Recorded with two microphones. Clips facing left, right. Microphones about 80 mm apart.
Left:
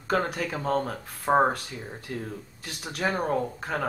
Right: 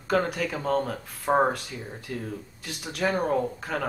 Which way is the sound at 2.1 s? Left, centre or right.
Left.